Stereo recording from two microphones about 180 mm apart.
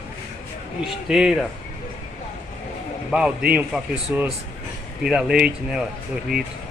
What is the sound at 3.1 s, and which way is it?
A man's voice, 5° right (ahead or behind).